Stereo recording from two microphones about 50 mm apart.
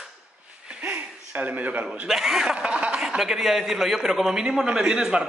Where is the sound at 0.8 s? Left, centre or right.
Right.